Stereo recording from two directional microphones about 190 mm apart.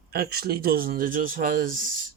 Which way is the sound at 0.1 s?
55° right (ahead or behind).